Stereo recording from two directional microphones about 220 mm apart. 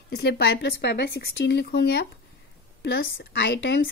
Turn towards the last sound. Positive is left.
turn(degrees=50)  # may be behind; listen again after turning